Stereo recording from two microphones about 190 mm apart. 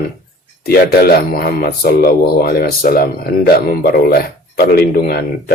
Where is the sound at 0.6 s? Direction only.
55° left (ahead or behind).